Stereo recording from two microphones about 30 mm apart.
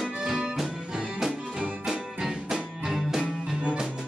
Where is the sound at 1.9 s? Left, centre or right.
Centre.